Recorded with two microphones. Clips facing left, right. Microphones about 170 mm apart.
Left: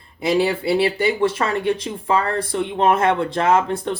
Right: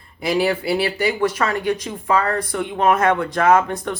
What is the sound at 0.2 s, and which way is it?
Speech, 25° left (ahead or behind).